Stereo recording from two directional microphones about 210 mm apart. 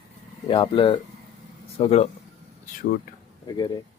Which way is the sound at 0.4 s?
25° left (ahead or behind).